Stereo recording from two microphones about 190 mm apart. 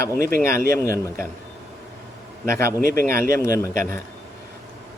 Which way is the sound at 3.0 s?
50° right (ahead or behind).